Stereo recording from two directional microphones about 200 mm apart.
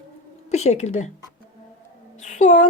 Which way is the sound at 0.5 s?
35° left (ahead or behind).